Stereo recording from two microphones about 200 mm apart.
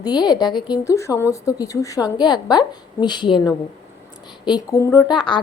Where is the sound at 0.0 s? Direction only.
20° left (ahead or behind).